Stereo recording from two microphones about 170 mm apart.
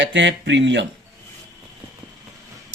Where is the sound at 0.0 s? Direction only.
90° right.